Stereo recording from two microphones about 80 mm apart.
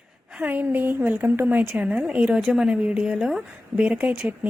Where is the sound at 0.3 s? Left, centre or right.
Right.